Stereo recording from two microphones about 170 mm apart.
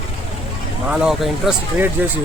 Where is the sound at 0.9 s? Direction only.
5° right (ahead or behind).